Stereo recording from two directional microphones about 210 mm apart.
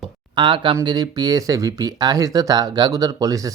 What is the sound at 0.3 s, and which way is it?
Speech, 25° right (ahead or behind).